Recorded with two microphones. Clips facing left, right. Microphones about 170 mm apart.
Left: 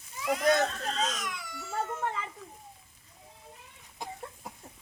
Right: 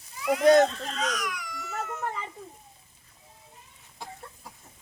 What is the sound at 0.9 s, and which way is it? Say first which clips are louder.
Speech: right 1 dB; 30° left (ahead or behind).